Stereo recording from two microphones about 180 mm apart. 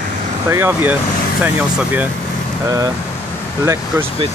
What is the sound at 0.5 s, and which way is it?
Speech, 15° right (ahead or behind).